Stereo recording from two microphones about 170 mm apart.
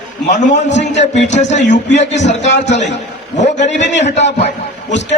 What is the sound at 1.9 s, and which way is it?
Speech, 90° left.